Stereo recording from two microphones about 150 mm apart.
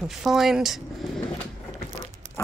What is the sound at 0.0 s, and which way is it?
Speech, 5° right (ahead or behind).